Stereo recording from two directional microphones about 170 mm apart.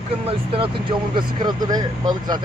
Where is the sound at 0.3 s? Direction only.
30° right (ahead or behind).